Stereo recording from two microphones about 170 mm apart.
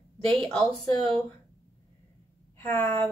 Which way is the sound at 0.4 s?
5° left (ahead or behind).